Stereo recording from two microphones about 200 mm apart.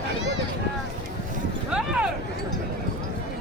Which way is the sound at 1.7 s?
5° right (ahead or behind).